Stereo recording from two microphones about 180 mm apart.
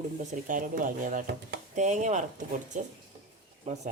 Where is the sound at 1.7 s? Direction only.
40° right (ahead or behind).